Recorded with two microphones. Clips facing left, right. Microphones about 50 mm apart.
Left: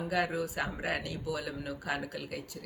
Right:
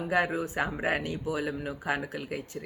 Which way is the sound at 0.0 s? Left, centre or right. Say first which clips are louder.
Right 4 dB; right.